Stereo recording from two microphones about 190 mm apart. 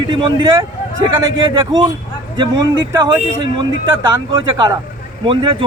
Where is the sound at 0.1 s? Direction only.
25° right (ahead or behind).